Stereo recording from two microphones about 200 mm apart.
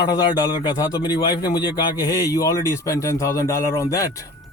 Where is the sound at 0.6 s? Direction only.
20° left (ahead or behind).